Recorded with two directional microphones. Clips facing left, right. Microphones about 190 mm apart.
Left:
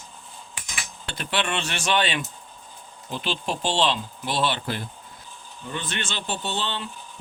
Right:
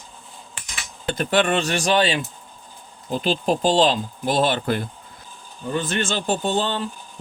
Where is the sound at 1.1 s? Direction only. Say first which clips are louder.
Right 8 dB; 45° right (ahead or behind).